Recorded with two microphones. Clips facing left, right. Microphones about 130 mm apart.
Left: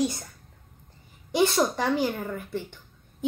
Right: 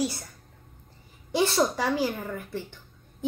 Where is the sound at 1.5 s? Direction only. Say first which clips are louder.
Even; 10° right (ahead or behind).